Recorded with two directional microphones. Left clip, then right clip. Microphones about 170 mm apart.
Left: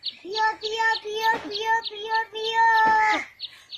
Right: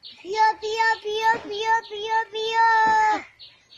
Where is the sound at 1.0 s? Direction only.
10° right (ahead or behind).